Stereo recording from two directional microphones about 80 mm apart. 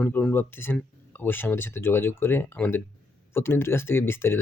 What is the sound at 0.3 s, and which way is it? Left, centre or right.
Speech, left.